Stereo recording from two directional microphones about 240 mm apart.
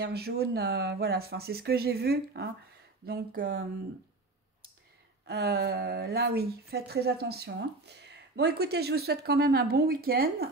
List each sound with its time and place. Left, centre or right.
0.0 s a woman's voice: right
5.2 s a woman's voice: right